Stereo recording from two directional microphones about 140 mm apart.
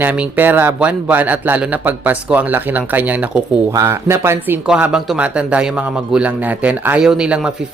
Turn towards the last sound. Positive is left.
turn(degrees=-5)  # may be behind; listen again after turning